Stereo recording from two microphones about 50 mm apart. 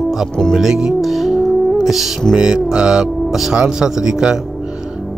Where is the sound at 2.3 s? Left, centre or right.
Centre.